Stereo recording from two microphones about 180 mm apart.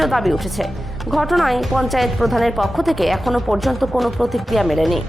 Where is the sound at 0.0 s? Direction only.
Centre (ahead or behind).